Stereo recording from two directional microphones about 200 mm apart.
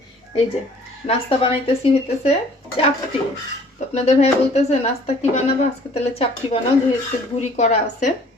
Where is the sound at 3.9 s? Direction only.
35° left (ahead or behind).